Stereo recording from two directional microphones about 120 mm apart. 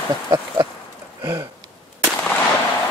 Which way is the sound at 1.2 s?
30° right (ahead or behind).